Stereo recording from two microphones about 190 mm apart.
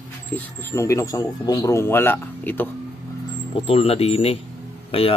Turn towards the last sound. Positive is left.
turn(degrees=30)  # may be behind; listen again after turning